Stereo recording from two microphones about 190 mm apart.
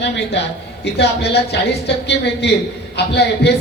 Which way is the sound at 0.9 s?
60° left (ahead or behind).